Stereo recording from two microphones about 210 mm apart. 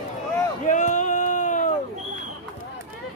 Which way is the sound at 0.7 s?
35° left (ahead or behind).